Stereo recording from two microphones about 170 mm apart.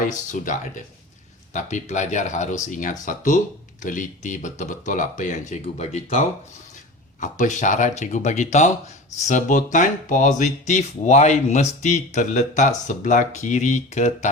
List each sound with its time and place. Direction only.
0.1 s speech: 50° left (ahead or behind)